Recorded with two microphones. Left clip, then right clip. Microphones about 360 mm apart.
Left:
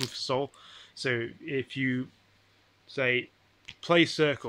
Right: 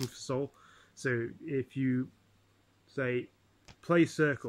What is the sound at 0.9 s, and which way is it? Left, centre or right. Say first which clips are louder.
Speech: left 3 dB; centre.